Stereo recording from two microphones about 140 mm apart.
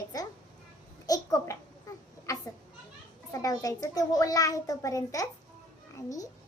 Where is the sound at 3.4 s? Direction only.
25° left (ahead or behind).